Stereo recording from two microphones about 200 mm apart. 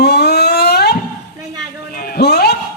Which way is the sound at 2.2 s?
55° left (ahead or behind).